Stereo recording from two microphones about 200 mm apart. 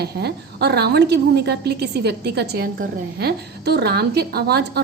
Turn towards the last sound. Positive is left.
turn(degrees=-55)  # may be behind; listen again after turning